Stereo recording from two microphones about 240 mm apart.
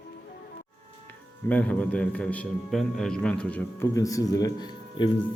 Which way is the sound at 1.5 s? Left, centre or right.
Centre.